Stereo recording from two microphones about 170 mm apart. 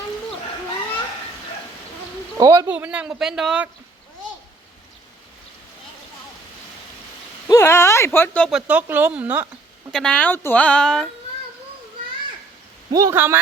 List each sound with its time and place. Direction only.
2.4 s speech: 20° right (ahead or behind)
2.6 s a man's voice: 10° right (ahead or behind)
7.4 s speech: 15° left (ahead or behind)
8.4 s speech: 5° right (ahead or behind)
9.9 s speech: 5° left (ahead or behind)
12.9 s speech: 20° right (ahead or behind)